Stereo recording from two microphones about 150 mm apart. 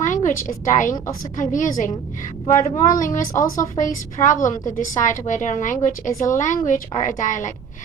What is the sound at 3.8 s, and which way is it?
A woman's voice, 55° left (ahead or behind).